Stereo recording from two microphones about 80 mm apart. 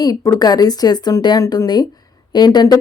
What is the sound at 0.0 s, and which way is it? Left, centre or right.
Speech, left.